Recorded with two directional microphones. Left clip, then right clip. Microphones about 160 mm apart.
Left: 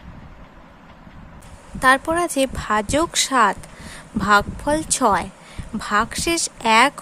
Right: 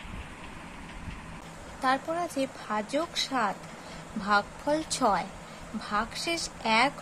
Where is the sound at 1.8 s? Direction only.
60° left (ahead or behind).